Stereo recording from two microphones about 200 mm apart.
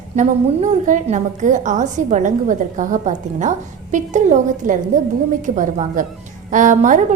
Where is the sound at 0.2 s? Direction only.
35° right (ahead or behind).